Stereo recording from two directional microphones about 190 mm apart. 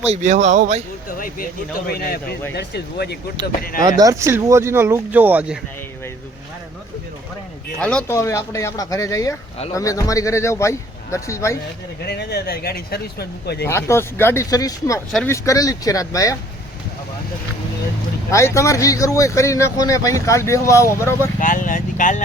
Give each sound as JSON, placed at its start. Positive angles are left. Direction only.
{"t": 0.0, "sound": "speech", "side_deg": -35}
{"t": 1.9, "sound": "speech", "side_deg": 55}
{"t": 3.8, "sound": "speech", "side_deg": -20}
{"t": 7.8, "sound": "speech", "side_deg": 5}
{"t": 8.0, "sound": "speech", "side_deg": 15}
{"t": 12.0, "sound": "speech", "side_deg": 60}
{"t": 13.7, "sound": "speech", "side_deg": 15}
{"t": 18.3, "sound": "speech", "side_deg": 15}
{"t": 21.4, "sound": "speech", "side_deg": 45}